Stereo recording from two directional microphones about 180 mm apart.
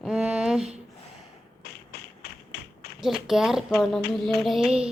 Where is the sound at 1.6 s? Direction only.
65° left (ahead or behind).